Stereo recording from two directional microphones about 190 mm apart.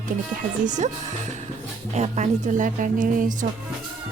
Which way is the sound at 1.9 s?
35° right (ahead or behind).